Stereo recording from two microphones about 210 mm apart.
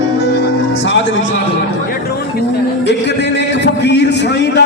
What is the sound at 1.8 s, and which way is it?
Music, 45° left (ahead or behind).